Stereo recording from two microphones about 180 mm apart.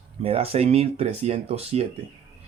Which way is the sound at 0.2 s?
35° right (ahead or behind).